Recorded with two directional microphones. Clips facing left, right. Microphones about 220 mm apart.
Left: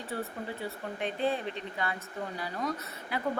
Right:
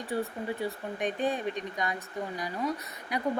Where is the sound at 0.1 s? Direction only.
15° right (ahead or behind).